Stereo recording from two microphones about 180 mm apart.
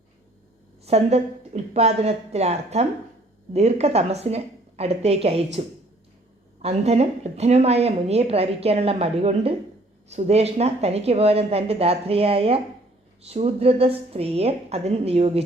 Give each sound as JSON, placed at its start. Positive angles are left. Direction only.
{"t": 0.9, "sound": "a woman's voice", "side_deg": -35}
{"t": 6.6, "sound": "a woman's voice", "side_deg": -35}